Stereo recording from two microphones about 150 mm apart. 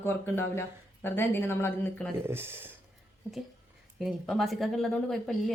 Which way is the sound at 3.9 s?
Centre (ahead or behind).